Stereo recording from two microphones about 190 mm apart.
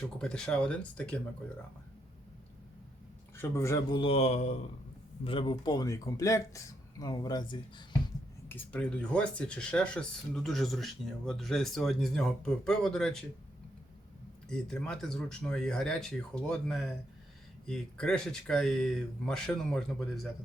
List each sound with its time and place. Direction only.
0.2 s speech: 5° left (ahead or behind)
3.3 s speech: 15° left (ahead or behind)
8.4 s speech: 10° left (ahead or behind)
14.5 s speech: 5° left (ahead or behind)